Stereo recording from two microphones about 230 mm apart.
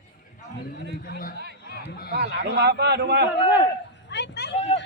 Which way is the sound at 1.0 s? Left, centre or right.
Left.